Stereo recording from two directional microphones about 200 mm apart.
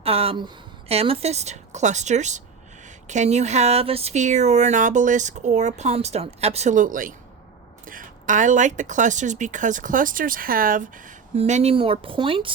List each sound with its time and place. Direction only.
0.0 s speech: 30° right (ahead or behind)